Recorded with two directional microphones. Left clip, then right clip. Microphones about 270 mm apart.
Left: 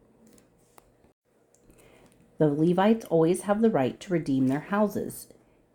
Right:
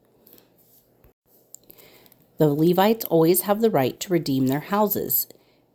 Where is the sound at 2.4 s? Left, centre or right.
Centre.